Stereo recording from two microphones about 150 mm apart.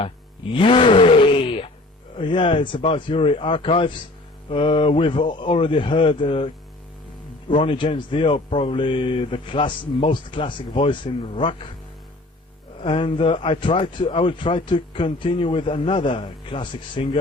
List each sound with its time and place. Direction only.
0.0 s groan: 35° left (ahead or behind)
2.1 s a man's voice: 35° left (ahead or behind)
12.8 s a man's voice: 35° left (ahead or behind)